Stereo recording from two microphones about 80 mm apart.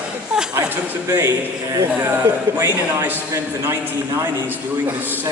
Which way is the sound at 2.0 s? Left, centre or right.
Right.